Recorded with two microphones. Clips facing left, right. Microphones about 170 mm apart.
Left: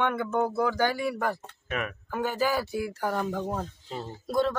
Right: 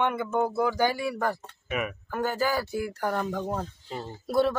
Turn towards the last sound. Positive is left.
turn(degrees=-5)  # may be behind; listen again after turning